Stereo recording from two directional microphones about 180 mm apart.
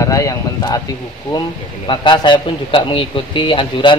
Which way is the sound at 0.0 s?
15° left (ahead or behind).